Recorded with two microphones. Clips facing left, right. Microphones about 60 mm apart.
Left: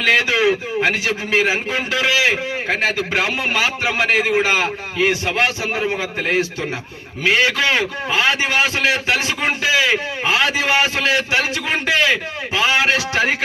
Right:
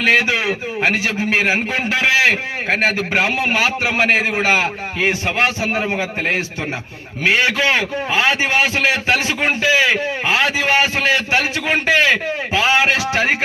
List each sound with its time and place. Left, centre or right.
0.0 s a man's voice: right